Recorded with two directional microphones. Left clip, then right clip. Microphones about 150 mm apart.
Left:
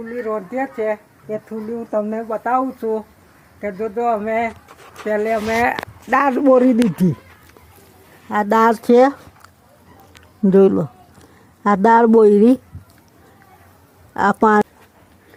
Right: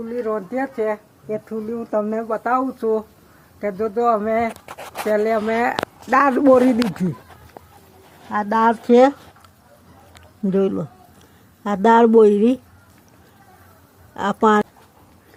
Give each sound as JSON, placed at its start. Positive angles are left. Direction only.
{"t": 0.0, "sound": "speech", "side_deg": -5}
{"t": 8.3, "sound": "speech", "side_deg": 50}
{"t": 10.4, "sound": "speech", "side_deg": 40}
{"t": 14.1, "sound": "a woman's voice", "side_deg": 50}